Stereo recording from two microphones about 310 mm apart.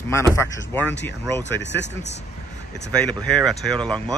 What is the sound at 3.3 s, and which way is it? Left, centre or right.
Speech, centre.